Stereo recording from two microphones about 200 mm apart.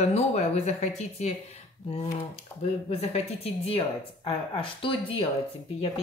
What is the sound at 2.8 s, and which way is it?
Speech, 30° left (ahead or behind).